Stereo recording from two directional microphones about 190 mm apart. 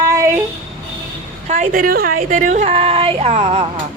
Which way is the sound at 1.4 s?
40° right (ahead or behind).